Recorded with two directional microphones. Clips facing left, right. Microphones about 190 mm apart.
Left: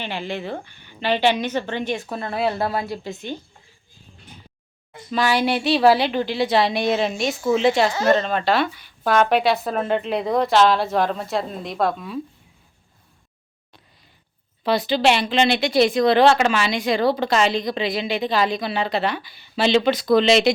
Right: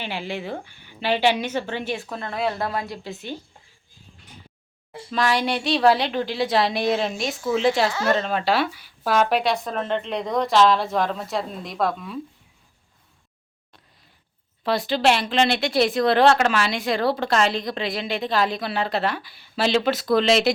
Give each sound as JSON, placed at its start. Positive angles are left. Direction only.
{"t": 0.0, "sound": "a woman's voice", "side_deg": -10}
{"t": 4.9, "sound": "a sound", "side_deg": -30}
{"t": 5.1, "sound": "speech", "side_deg": 5}
{"t": 14.6, "sound": "speech", "side_deg": 0}